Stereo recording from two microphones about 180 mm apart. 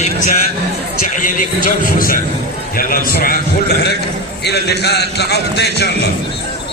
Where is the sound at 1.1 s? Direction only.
50° left (ahead or behind).